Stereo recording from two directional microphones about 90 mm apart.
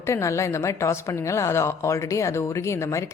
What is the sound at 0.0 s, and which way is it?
Speech, 35° left (ahead or behind).